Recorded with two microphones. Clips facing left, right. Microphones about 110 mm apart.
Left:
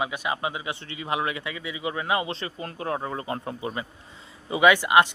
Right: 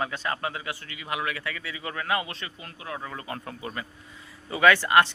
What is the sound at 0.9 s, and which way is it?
A man's voice, 30° left (ahead or behind).